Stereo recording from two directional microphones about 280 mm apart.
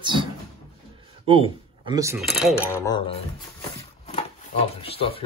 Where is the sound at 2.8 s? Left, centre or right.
Centre.